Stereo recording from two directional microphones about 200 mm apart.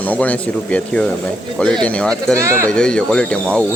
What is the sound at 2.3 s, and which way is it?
Speech, 15° right (ahead or behind).